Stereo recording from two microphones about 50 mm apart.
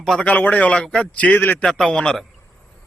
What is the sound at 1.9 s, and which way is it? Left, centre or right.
Speech, centre.